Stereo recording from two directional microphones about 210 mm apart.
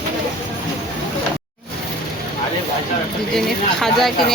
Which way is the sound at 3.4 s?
Centre (ahead or behind).